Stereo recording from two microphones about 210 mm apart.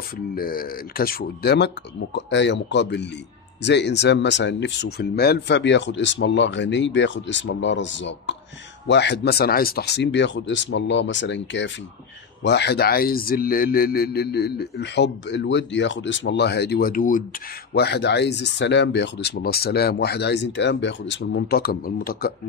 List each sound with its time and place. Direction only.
0.3 s speech: 45° left (ahead or behind)
17.7 s speech: 50° left (ahead or behind)